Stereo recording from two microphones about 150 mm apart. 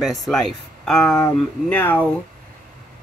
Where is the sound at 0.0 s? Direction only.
Centre (ahead or behind).